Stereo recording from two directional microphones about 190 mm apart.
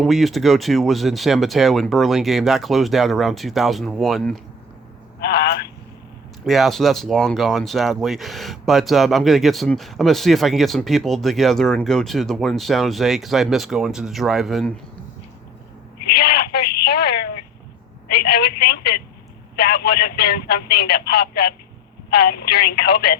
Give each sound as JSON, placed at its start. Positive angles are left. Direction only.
{"t": 0.0, "sound": "speech", "side_deg": 0}
{"t": 5.2, "sound": "telephone", "side_deg": 55}
{"t": 6.4, "sound": "speech", "side_deg": 0}
{"t": 16.0, "sound": "telephone", "side_deg": 55}
{"t": 18.1, "sound": "speech", "side_deg": 55}